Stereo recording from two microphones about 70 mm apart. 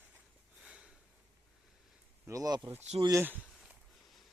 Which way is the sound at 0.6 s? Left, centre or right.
Centre.